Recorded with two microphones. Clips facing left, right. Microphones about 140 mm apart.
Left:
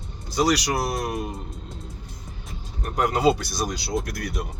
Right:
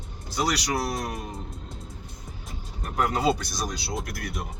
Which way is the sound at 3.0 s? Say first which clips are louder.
Left 4 dB; centre (ahead or behind).